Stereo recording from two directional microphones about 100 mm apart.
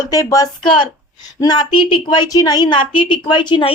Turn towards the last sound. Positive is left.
turn(degrees=55)  # may be behind; listen again after turning